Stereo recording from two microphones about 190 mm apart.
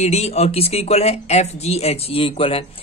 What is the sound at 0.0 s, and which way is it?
A man's voice, 35° left (ahead or behind).